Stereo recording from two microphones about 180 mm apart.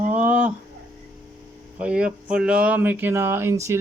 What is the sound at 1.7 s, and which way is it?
Speech, 5° right (ahead or behind).